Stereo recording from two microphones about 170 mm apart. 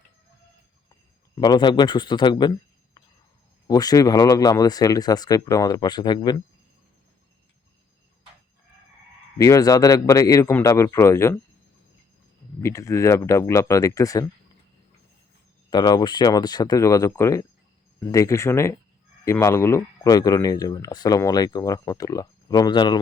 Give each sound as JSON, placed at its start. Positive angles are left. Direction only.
{"t": 1.4, "sound": "speech", "side_deg": 25}
{"t": 3.7, "sound": "speech", "side_deg": 20}
{"t": 9.4, "sound": "speech", "side_deg": 20}
{"t": 12.6, "sound": "speech", "side_deg": 20}
{"t": 15.7, "sound": "speech", "side_deg": 25}